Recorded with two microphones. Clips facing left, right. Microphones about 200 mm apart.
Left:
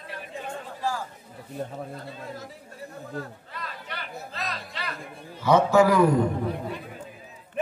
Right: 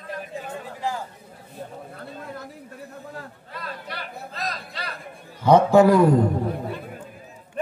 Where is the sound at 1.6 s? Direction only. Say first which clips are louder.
Left 4 dB; 55° left (ahead or behind).